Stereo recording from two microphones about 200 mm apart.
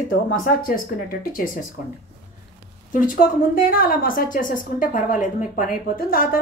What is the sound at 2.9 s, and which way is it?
A woman's voice, 45° left (ahead or behind).